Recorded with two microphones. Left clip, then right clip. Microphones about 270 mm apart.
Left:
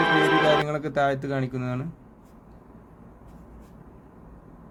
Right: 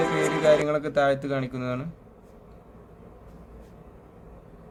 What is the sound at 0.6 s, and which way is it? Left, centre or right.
Speech, centre.